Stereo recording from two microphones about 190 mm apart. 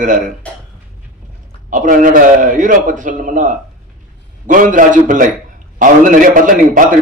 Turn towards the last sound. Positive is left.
turn(degrees=-45)  # may be behind; listen again after turning